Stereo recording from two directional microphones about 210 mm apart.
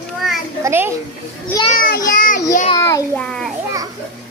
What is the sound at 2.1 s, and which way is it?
Child singing, 40° left (ahead or behind).